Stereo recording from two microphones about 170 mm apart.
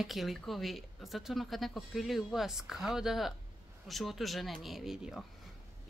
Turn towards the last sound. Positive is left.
turn(degrees=0)  # may be behind; listen again after turning